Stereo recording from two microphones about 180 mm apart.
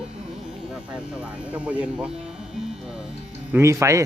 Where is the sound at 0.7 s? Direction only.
5° right (ahead or behind).